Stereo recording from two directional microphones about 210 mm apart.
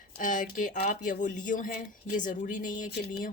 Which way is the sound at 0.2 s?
40° left (ahead or behind).